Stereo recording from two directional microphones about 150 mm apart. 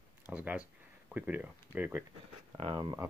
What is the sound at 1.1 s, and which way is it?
Speech, 10° right (ahead or behind).